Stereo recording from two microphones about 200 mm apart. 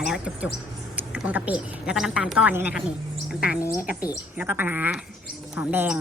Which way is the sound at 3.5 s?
15° left (ahead or behind).